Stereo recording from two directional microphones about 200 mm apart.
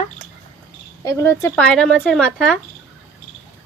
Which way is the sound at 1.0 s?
15° left (ahead or behind).